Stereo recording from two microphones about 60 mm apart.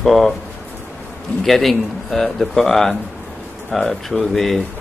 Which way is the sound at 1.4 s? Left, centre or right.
Centre.